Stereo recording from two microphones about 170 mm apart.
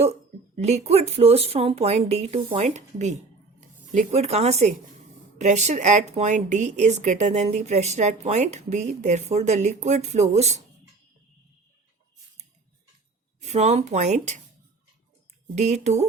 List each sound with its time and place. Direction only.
0.5 s speech: 40° right (ahead or behind)
13.4 s speech: 40° right (ahead or behind)
15.5 s speech: 40° right (ahead or behind)